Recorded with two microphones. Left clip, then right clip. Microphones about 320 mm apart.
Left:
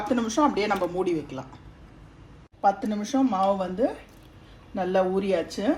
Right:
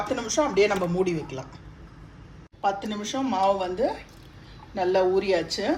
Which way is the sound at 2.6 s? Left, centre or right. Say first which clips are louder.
Left 3 dB; centre.